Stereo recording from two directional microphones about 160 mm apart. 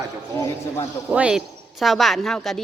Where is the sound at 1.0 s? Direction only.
10° right (ahead or behind).